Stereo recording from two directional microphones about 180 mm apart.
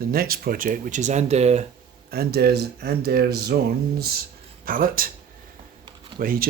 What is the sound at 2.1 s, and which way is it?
Speech, 60° right (ahead or behind).